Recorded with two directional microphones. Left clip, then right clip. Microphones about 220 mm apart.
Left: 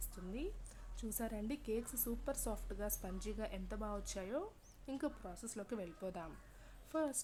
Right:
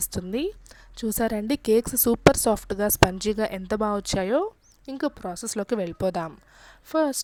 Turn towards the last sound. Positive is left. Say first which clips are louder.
# right 17 dB
turn(degrees=-40)  # may be behind; listen again after turning